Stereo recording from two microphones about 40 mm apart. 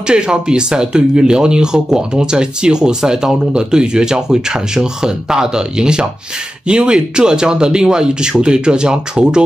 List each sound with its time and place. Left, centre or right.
0.0 s speech: right